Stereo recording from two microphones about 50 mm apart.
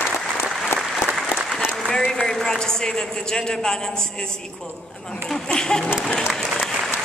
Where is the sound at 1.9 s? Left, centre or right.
Centre.